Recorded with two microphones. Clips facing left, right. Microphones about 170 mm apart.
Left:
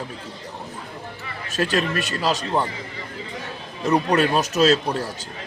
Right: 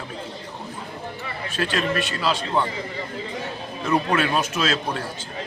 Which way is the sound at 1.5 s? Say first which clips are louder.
Left 2 dB; 40° left (ahead or behind).